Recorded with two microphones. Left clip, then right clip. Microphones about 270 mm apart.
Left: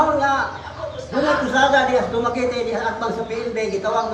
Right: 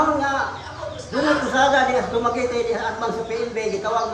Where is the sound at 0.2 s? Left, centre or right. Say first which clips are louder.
Left 3 dB; centre.